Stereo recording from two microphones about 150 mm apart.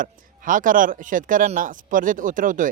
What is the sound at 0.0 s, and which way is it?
Speech, 65° right (ahead or behind).